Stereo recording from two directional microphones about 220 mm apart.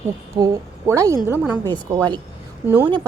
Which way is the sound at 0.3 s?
15° right (ahead or behind).